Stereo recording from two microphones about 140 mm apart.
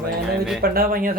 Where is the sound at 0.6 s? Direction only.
90° right.